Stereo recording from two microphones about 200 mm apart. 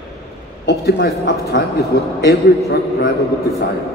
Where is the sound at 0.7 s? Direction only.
55° left (ahead or behind).